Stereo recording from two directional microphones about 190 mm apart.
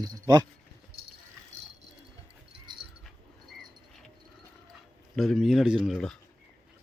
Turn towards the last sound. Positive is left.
turn(degrees=0)  # may be behind; listen again after turning